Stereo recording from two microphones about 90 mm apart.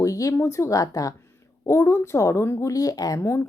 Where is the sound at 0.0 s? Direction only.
40° left (ahead or behind).